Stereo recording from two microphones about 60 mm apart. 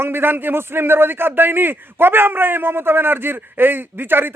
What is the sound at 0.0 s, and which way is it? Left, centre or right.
A man's voice, right.